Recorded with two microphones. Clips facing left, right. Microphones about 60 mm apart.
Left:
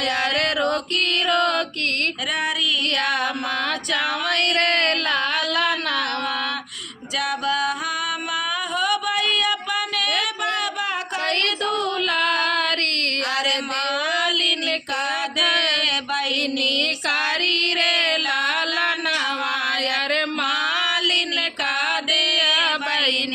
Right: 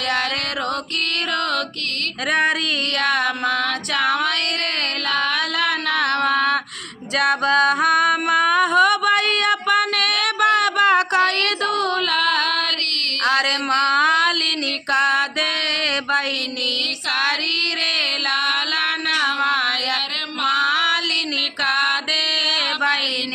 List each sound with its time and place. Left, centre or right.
1.3 s music: right
3.9 s female singing: right
5.5 s music: right
13.2 s a sound: right
14.9 s music: right
17.1 s child singing: right
19.0 s music: right